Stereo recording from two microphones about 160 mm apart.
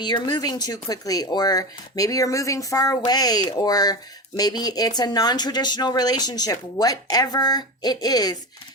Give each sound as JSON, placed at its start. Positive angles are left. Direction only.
{"t": 0.0, "sound": "speech", "side_deg": 30}